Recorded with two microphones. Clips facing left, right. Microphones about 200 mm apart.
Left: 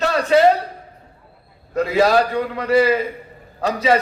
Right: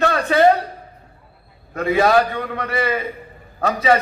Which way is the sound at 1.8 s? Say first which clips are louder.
Left 1 dB; 55° right (ahead or behind).